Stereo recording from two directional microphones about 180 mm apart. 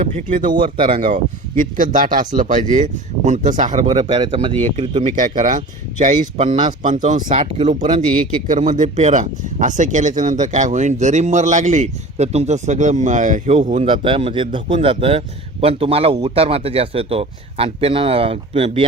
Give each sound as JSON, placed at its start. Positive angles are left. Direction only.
{"t": 0.9, "sound": "a man's voice", "side_deg": -45}
{"t": 7.8, "sound": "speech", "side_deg": -25}
{"t": 8.4, "sound": "speech", "side_deg": -45}
{"t": 13.8, "sound": "a man's voice", "side_deg": -30}